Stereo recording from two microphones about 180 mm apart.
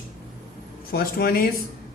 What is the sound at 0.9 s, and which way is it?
Speech, 55° left (ahead or behind).